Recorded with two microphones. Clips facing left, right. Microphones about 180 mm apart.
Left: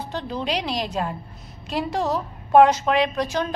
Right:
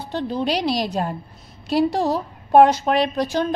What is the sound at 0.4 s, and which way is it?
A woman's voice, 35° right (ahead or behind).